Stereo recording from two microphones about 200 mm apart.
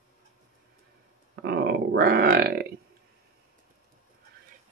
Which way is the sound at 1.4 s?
50° right (ahead or behind).